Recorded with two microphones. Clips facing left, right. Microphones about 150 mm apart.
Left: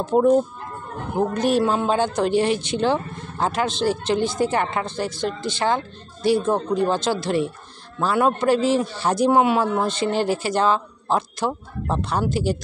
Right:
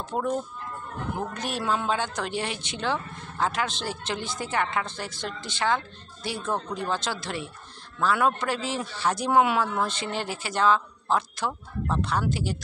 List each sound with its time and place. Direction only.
0.0 s speech: 35° left (ahead or behind)